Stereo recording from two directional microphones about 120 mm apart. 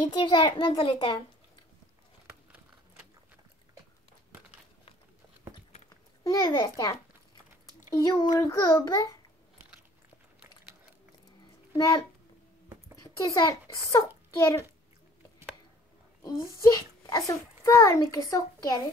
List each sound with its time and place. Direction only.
0.1 s child singing: 40° left (ahead or behind)
5.9 s a child's voice: 30° left (ahead or behind)
8.0 s child singing: 35° left (ahead or behind)
13.0 s a child's voice: 30° left (ahead or behind)
16.2 s a child's voice: 30° left (ahead or behind)